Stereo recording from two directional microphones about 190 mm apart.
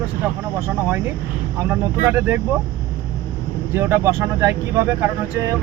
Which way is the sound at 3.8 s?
15° right (ahead or behind).